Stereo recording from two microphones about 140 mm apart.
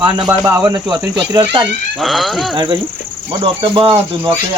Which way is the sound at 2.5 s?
35° right (ahead or behind).